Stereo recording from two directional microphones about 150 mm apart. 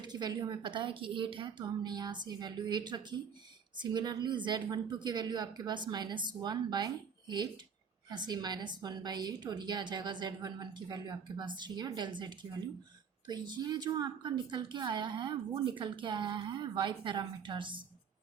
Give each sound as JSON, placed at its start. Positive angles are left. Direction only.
{"t": 0.0, "sound": "a woman's voice", "side_deg": -30}